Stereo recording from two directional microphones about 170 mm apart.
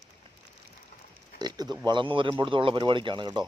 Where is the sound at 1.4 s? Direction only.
25° right (ahead or behind).